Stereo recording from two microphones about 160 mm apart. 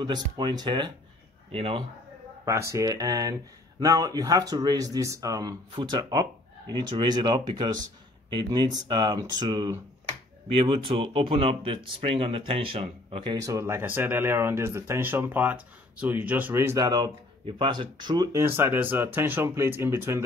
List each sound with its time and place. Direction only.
0.0 s speech: 30° right (ahead or behind)
2.4 s speech: 20° right (ahead or behind)
18.4 s speech: 15° right (ahead or behind)